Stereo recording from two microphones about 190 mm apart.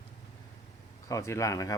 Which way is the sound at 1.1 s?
15° left (ahead or behind).